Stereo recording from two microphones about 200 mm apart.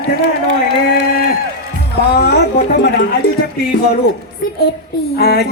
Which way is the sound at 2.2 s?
50° left (ahead or behind).